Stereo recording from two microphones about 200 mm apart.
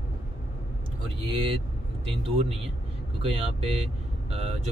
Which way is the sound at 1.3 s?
25° right (ahead or behind).